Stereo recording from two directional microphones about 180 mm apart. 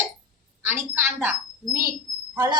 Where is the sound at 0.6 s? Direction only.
15° right (ahead or behind).